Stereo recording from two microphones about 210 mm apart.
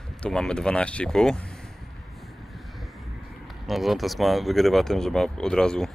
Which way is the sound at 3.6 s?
Centre (ahead or behind).